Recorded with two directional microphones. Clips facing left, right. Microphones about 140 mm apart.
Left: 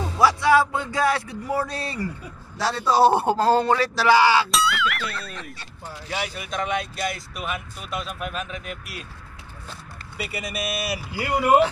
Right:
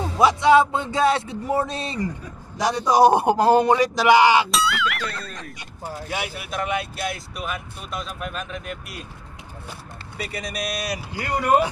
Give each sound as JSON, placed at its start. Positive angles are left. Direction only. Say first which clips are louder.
{"t": 0.2, "sound": "speech", "louder": "right 3 dB", "side_deg": -20}
{"t": 4.5, "sound": "speech", "louder": "even", "side_deg": 0}
{"t": 5.9, "sound": "speech", "louder": "right 4 dB", "side_deg": -45}
{"t": 6.1, "sound": "speech", "louder": "left 1 dB", "side_deg": -5}
{"t": 10.1, "sound": "speech", "louder": "even", "side_deg": 5}